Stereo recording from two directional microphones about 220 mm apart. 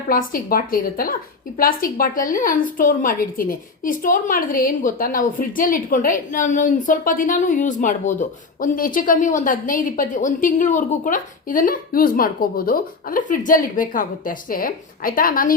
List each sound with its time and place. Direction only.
0.1 s a woman's voice: 40° left (ahead or behind)